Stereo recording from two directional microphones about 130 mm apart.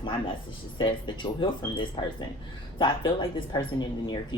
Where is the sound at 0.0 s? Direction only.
40° left (ahead or behind).